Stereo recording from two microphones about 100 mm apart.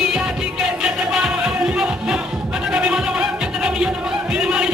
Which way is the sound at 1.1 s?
5° right (ahead or behind).